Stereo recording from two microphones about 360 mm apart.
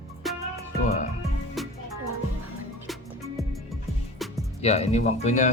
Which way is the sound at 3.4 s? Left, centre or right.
Centre.